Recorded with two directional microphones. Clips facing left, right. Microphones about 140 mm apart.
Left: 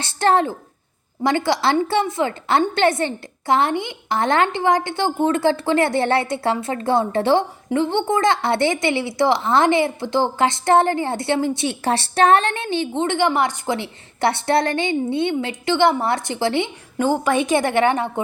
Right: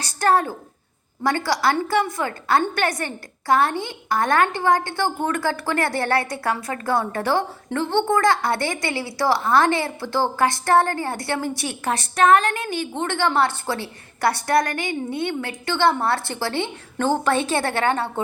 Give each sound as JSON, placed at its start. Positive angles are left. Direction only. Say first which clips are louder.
{"t": 0.0, "sound": "a woman's voice", "louder": "left 2 dB", "side_deg": 25}